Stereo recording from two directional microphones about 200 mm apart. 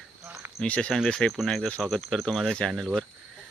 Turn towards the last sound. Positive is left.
turn(degrees=0)  # may be behind; listen again after turning